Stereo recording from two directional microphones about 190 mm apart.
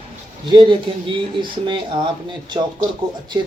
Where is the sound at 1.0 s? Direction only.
25° right (ahead or behind).